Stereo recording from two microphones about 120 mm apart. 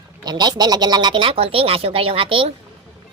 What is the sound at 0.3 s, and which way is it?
A woman's voice, 35° right (ahead or behind).